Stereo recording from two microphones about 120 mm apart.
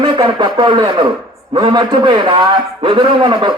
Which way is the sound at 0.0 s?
35° right (ahead or behind).